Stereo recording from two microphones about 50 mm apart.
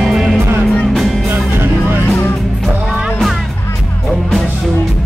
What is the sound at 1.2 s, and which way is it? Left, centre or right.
Music, right.